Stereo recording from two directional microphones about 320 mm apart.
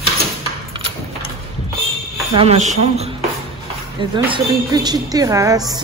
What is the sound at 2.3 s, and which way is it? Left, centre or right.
A woman's voice, centre.